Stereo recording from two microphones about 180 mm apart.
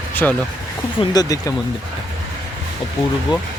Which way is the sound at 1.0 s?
20° left (ahead or behind).